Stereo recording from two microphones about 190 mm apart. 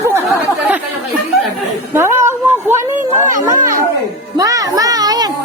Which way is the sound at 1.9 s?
15° right (ahead or behind).